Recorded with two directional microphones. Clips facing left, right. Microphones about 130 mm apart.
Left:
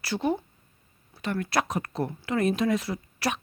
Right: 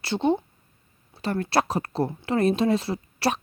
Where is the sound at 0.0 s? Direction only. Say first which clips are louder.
Right 4 dB; 25° right (ahead or behind).